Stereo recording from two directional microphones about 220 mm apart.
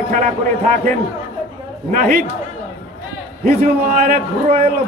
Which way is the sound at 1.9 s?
40° right (ahead or behind).